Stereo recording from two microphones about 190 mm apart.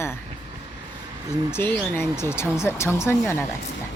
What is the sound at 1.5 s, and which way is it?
Speech, 10° left (ahead or behind).